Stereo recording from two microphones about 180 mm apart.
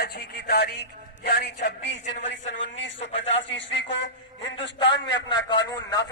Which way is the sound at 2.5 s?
90° left.